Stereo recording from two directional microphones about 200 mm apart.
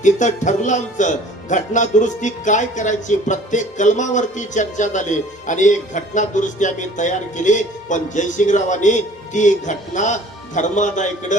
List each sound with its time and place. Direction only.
0.0 s a man's voice: 40° left (ahead or behind)